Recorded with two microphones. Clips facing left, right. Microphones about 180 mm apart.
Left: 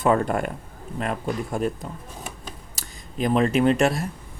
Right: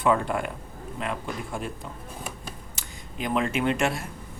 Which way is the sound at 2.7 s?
40° left (ahead or behind).